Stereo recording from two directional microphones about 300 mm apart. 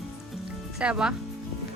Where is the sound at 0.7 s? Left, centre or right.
Centre.